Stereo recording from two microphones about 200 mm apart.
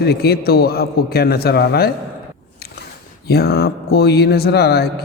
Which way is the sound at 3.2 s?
50° left (ahead or behind).